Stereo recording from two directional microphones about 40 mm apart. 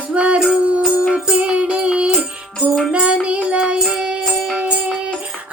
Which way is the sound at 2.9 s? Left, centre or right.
Right.